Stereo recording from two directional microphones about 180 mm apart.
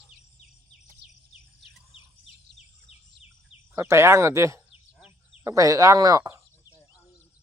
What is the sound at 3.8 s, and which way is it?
Speech, 15° right (ahead or behind).